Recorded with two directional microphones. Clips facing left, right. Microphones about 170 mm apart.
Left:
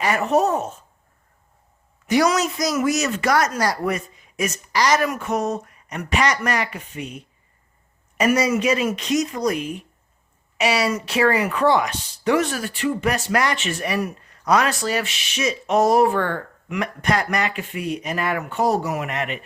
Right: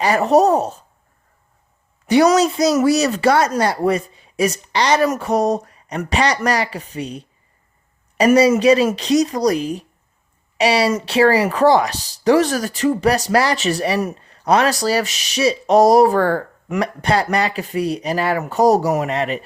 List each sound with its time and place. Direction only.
0.0 s speech: 35° right (ahead or behind)
2.0 s speech: 35° right (ahead or behind)